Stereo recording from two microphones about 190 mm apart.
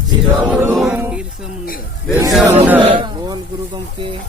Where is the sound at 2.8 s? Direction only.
30° right (ahead or behind).